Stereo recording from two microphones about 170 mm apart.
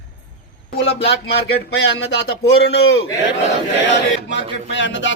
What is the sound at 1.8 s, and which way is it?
Speech, 90° left.